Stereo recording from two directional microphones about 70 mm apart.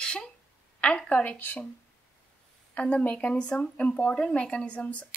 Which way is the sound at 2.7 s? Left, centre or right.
Left.